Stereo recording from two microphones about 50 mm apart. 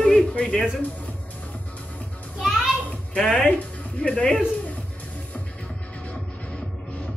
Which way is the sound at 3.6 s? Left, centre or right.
Left.